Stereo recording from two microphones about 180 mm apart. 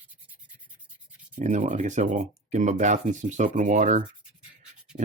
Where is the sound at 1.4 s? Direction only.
45° right (ahead or behind).